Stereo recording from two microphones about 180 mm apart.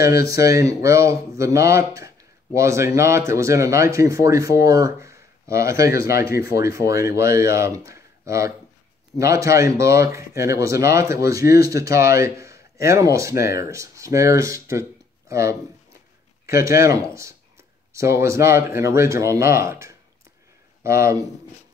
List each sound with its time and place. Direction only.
0.0 s speech: 15° right (ahead or behind)